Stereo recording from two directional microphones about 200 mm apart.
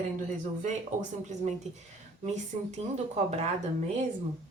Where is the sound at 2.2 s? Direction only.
35° right (ahead or behind).